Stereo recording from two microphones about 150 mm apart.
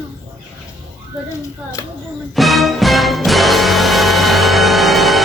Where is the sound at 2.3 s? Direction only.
Centre (ahead or behind).